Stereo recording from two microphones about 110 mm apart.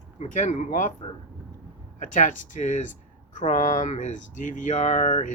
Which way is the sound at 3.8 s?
90° left.